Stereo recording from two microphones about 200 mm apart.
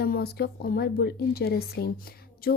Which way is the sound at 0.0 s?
50° left (ahead or behind).